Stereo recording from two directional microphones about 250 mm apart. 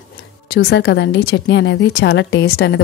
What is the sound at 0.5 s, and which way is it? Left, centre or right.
A woman's voice, left.